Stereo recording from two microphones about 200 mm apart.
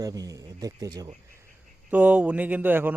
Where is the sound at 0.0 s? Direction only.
15° right (ahead or behind).